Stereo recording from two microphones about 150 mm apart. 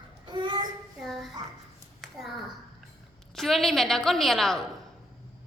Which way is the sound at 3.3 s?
Centre (ahead or behind).